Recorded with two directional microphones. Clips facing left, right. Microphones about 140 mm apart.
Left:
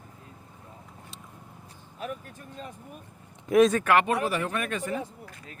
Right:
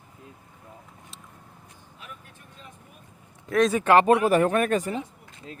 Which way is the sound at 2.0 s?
40° left (ahead or behind).